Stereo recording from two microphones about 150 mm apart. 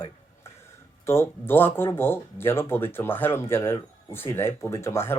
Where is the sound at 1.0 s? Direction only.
15° left (ahead or behind).